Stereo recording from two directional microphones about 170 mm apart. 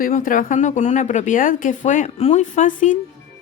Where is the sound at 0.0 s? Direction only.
50° left (ahead or behind).